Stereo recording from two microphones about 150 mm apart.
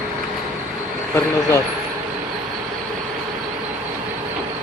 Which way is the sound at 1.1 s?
20° left (ahead or behind).